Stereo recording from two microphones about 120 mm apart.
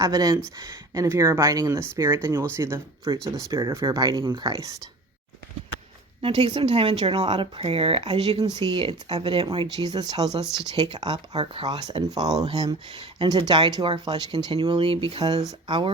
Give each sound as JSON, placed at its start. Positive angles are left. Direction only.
{"t": 0.0, "sound": "speech", "side_deg": -30}
{"t": 6.2, "sound": "speech", "side_deg": -50}
{"t": 8.4, "sound": "speech", "side_deg": -35}
{"t": 9.7, "sound": "speech", "side_deg": -35}
{"t": 10.4, "sound": "speech", "side_deg": -5}
{"t": 10.8, "sound": "speech", "side_deg": -40}